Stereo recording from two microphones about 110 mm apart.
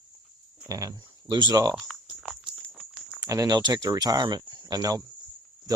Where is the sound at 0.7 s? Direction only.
30° right (ahead or behind).